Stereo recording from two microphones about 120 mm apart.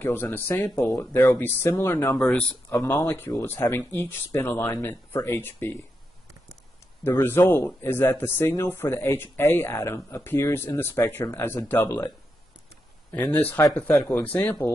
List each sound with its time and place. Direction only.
0.0 s speech: 15° left (ahead or behind)
2.1 s speech: 5° left (ahead or behind)
2.7 s speech: 25° left (ahead or behind)
7.1 s speech: 20° left (ahead or behind)
13.1 s speech: 10° left (ahead or behind)